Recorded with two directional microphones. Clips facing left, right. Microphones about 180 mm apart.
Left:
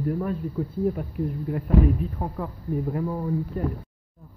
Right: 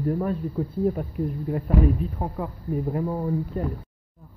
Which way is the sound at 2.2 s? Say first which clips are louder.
Right 1 dB; 20° right (ahead or behind).